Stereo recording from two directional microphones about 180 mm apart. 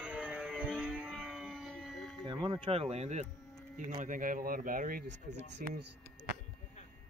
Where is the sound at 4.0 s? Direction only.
50° right (ahead or behind).